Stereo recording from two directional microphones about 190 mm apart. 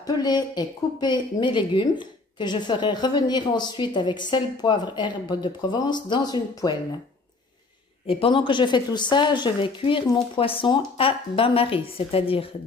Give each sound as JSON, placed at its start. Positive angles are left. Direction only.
{"t": 0.0, "sound": "speech", "side_deg": 20}
{"t": 8.1, "sound": "speech", "side_deg": 30}